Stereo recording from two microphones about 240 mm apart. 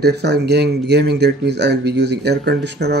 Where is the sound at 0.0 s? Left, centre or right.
Right.